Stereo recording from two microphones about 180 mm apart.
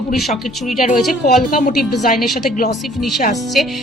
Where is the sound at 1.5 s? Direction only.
55° left (ahead or behind).